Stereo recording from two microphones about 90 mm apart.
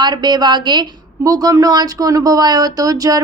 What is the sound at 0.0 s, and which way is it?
A woman's voice, 55° right (ahead or behind).